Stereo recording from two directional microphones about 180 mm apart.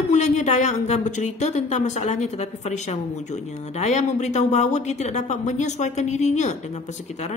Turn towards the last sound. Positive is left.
turn(degrees=40)  # may be behind; listen again after turning